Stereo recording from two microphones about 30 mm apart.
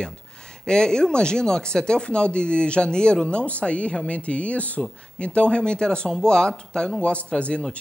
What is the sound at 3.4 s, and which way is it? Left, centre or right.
Speech, left.